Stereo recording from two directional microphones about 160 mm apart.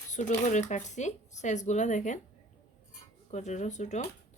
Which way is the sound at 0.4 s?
50° left (ahead or behind).